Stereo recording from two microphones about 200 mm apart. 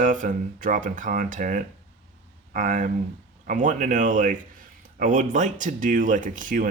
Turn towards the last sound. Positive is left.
turn(degrees=-40)  # may be behind; listen again after turning